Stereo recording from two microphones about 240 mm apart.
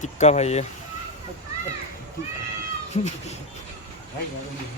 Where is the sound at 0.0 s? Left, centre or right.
Left.